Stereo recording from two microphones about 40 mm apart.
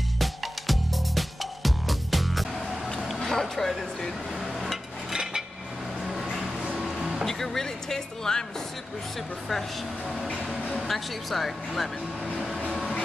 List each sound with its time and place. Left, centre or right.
0.2 s music: centre
3.2 s a sound: centre
5.1 s dishes: centre
6.8 s a sound: centre
7.2 s speech: centre
9.5 s speech: centre